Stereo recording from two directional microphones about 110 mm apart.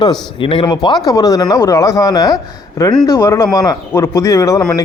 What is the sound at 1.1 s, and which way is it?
Speech, 35° left (ahead or behind).